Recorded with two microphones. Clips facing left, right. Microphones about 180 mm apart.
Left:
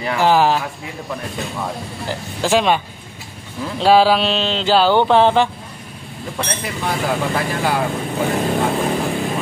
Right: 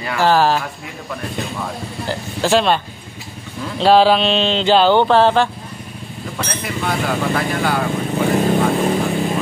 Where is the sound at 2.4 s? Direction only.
15° left (ahead or behind).